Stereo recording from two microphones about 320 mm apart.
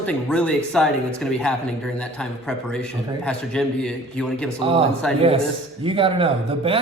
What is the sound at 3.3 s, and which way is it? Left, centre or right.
A man's voice, centre.